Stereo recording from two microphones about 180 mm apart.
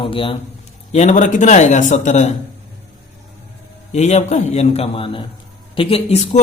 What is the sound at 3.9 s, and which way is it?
Speech, 40° left (ahead or behind).